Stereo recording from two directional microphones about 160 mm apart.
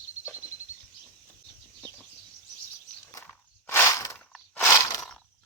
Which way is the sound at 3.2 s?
15° left (ahead or behind).